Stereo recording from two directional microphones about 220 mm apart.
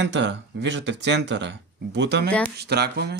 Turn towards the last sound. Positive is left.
turn(degrees=-50)  # may be behind; listen again after turning